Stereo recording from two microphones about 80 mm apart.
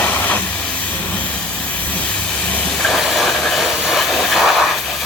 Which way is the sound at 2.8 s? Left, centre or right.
Centre.